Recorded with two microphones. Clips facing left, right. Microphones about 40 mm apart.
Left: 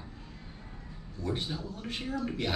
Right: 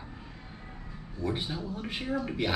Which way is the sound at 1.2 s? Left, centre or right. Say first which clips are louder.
Right 2 dB; centre.